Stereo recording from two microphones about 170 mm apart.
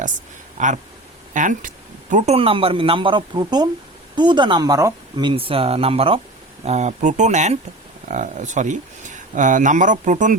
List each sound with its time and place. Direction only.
0.6 s speech: 45° right (ahead or behind)